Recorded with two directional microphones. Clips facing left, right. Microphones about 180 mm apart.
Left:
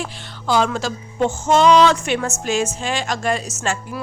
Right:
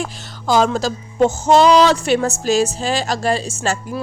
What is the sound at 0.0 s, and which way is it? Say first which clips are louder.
Music: right 3 dB; 40° right (ahead or behind).